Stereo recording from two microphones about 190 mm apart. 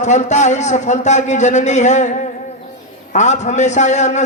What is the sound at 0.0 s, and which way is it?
A man's voice, 40° left (ahead or behind).